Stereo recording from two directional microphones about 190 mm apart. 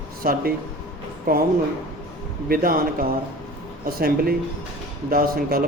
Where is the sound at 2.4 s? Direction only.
50° right (ahead or behind).